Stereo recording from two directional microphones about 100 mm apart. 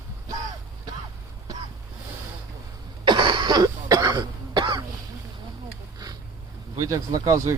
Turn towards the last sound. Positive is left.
turn(degrees=-35)  # may be behind; listen again after turning